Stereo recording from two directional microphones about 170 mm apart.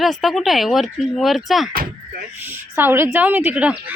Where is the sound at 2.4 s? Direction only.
10° right (ahead or behind).